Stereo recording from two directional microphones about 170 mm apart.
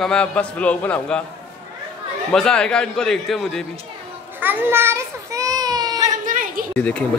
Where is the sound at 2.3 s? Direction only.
5° left (ahead or behind).